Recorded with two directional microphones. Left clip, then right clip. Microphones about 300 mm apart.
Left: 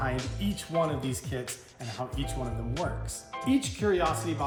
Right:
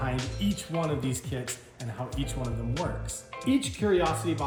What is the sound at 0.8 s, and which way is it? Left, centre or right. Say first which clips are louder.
Speech: even; centre.